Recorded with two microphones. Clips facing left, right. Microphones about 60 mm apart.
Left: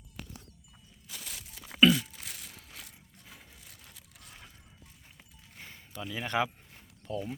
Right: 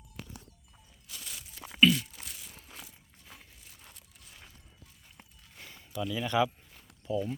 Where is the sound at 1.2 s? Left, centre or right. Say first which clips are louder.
Even; left.